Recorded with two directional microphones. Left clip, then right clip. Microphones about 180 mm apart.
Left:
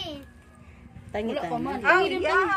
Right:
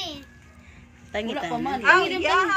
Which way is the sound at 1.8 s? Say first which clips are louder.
Right 3 dB; 60° left (ahead or behind).